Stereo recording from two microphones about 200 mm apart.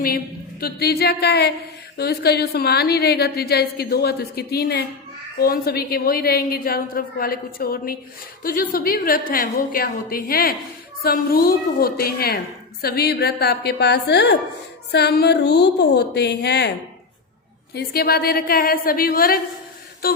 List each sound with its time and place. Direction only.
0.6 s a woman's voice: 50° left (ahead or behind)
17.7 s a woman's voice: 50° left (ahead or behind)